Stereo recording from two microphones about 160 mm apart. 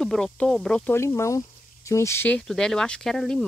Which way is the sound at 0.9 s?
15° left (ahead or behind).